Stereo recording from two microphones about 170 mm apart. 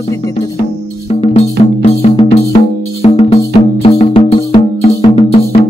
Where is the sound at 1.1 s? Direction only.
40° left (ahead or behind).